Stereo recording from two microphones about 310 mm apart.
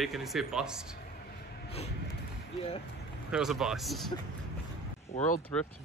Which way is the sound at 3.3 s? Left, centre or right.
Centre.